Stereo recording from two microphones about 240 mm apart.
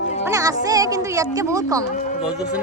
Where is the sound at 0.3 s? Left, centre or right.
Centre.